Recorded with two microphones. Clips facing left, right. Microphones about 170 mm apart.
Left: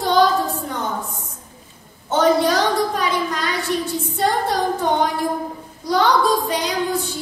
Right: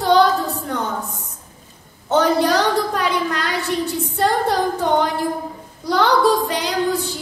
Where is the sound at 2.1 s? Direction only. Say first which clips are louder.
Even; 65° right (ahead or behind).